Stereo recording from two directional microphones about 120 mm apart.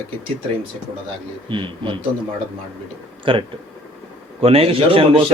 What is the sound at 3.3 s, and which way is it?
Speech, 45° right (ahead or behind).